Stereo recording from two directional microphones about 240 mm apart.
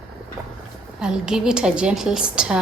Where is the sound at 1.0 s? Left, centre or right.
Centre.